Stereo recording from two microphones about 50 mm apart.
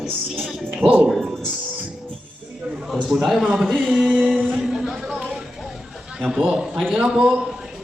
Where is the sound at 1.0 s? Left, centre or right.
Centre.